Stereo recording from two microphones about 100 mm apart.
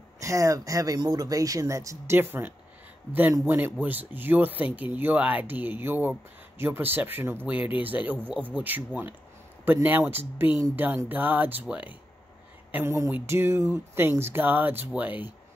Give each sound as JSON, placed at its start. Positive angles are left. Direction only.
{"t": 0.2, "sound": "speech", "side_deg": -30}
{"t": 12.7, "sound": "speech", "side_deg": -25}